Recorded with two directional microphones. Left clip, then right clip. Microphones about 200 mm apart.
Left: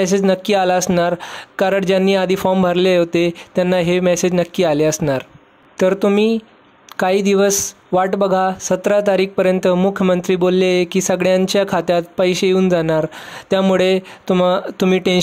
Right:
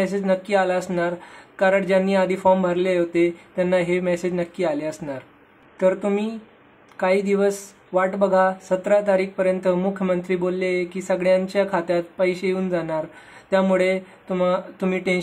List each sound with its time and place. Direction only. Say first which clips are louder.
0.0 s speech: left 6 dB; 40° left (ahead or behind)